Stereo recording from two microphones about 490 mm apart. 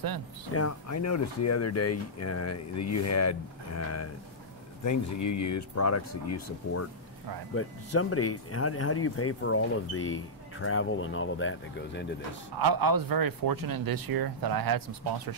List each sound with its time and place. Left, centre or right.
0.6 s speech: left
12.5 s speech: right